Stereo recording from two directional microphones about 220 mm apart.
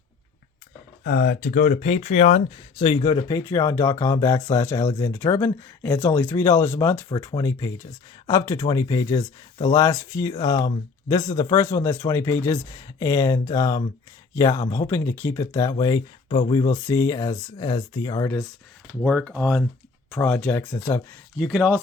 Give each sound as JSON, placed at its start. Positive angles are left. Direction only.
{"t": 1.0, "sound": "speech", "side_deg": 40}
{"t": 19.0, "sound": "speech", "side_deg": 0}
{"t": 21.3, "sound": "speech", "side_deg": 0}